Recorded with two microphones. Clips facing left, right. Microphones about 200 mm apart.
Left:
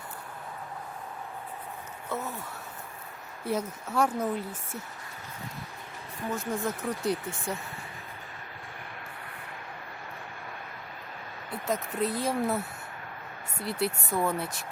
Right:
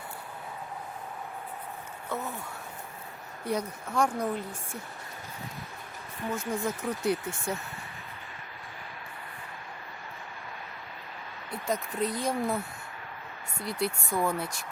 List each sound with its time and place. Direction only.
2.0 s speech: centre (ahead or behind)
3.4 s speech: 5° left (ahead or behind)
6.3 s speech: centre (ahead or behind)
11.6 s speech: 5° left (ahead or behind)
13.6 s speech: 5° left (ahead or behind)